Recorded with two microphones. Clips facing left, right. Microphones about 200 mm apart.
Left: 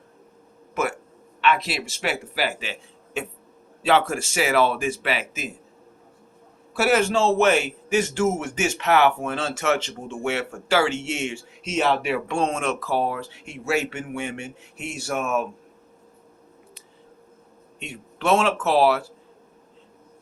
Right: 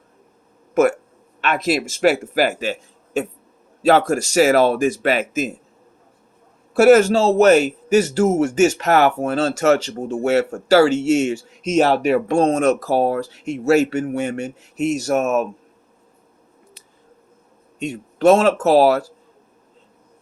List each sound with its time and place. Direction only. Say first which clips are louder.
0.7 s a man's voice: right 11 dB; 45° right (ahead or behind)
6.7 s a man's voice: right 9 dB; 45° right (ahead or behind)
17.7 s a man's voice: right 12 dB; 40° right (ahead or behind)